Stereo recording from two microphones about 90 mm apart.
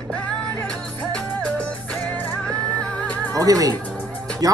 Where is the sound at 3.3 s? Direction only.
40° right (ahead or behind).